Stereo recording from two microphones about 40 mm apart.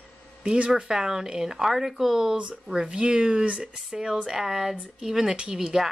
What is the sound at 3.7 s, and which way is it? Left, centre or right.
Speech, centre.